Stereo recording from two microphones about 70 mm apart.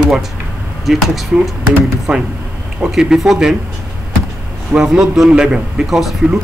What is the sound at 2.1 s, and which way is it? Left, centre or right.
A man's voice, centre.